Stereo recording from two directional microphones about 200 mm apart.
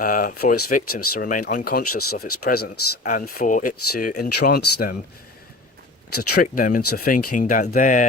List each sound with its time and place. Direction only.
0.0 s speech: 45° left (ahead or behind)
6.1 s speech: 45° left (ahead or behind)